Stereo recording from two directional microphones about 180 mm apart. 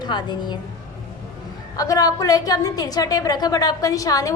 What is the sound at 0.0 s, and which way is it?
Speech, 25° left (ahead or behind).